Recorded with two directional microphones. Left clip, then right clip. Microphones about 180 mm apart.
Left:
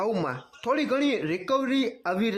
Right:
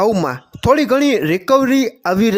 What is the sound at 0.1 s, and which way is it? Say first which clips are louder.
Speech: right 10 dB; 30° right (ahead or behind).